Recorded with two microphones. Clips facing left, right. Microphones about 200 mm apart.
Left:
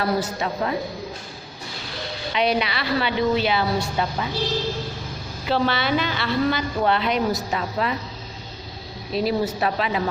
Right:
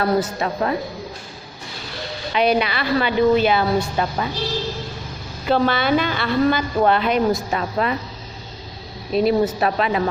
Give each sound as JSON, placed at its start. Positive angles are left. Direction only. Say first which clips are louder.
{"t": 0.0, "sound": "a woman's voice", "louder": "right 4 dB", "side_deg": -50}
{"t": 2.3, "sound": "a woman's voice", "louder": "right 4 dB", "side_deg": -50}
{"t": 5.5, "sound": "a woman's voice", "louder": "right 4 dB", "side_deg": -50}
{"t": 9.1, "sound": "a woman's voice", "louder": "right 5 dB", "side_deg": -50}